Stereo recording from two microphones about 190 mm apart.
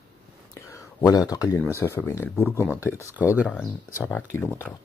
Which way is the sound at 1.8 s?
15° left (ahead or behind).